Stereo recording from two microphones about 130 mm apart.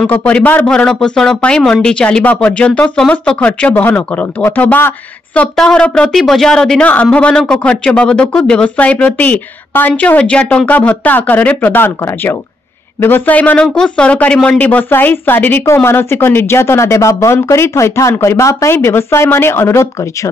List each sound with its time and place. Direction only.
0.0 s speech: 10° left (ahead or behind)